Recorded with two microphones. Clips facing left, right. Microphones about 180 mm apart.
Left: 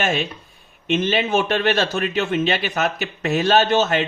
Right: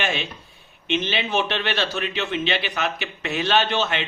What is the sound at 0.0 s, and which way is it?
Speech, 45° left (ahead or behind).